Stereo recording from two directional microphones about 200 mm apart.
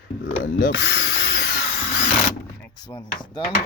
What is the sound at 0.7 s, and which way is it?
Ratchet, 65° left (ahead or behind).